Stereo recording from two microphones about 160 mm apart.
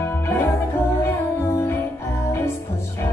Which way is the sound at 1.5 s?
20° left (ahead or behind).